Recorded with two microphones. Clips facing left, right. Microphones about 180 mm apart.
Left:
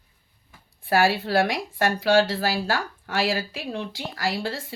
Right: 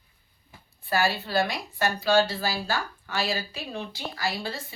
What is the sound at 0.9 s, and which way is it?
A woman's voice, 90° left.